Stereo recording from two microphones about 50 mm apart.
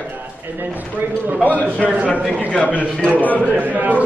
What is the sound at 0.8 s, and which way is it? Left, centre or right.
Speech, right.